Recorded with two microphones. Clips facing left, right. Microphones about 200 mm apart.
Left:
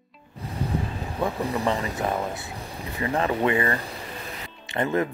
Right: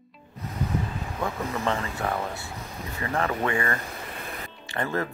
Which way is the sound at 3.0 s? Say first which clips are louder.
Left 4 dB; 20° left (ahead or behind).